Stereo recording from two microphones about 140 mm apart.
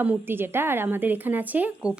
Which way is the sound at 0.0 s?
15° right (ahead or behind).